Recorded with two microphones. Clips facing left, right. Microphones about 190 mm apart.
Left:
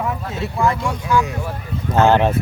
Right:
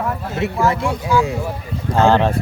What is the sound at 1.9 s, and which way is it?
Speech, 20° left (ahead or behind).